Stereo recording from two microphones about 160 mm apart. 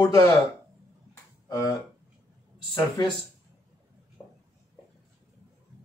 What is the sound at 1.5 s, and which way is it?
Speech, 20° left (ahead or behind).